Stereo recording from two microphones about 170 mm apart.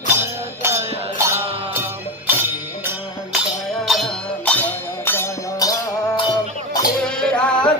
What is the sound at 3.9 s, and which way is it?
Music, centre (ahead or behind).